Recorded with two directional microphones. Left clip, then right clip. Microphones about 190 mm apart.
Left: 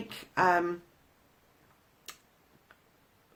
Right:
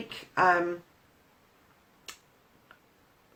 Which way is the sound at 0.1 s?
30° left (ahead or behind).